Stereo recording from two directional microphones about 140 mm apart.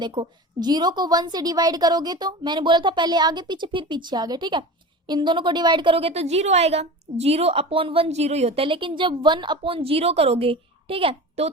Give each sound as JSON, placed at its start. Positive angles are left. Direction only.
{"t": 0.0, "sound": "a woman's voice", "side_deg": -35}